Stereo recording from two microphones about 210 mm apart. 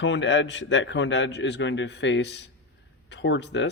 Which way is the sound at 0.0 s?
60° left (ahead or behind).